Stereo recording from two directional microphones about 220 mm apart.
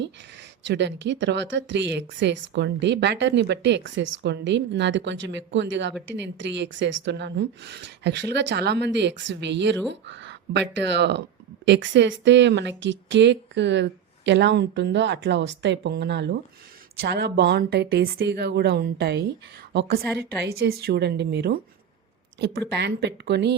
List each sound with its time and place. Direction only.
0.6 s speech: 50° right (ahead or behind)
22.7 s speech: 50° right (ahead or behind)